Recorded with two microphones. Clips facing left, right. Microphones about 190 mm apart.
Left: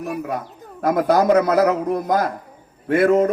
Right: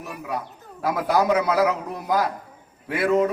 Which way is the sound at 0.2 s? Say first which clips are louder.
Left 4 dB; 50° left (ahead or behind).